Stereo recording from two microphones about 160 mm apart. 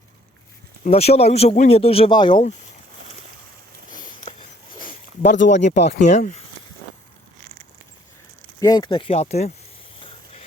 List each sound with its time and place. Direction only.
0.9 s speech: 40° left (ahead or behind)
4.8 s a sound: 55° left (ahead or behind)
5.6 s speech: 45° left (ahead or behind)
8.6 s speech: 25° left (ahead or behind); by 9.5 s 45° left (ahead or behind)